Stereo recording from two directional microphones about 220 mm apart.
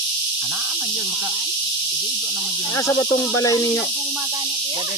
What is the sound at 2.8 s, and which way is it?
Speech, 5° left (ahead or behind).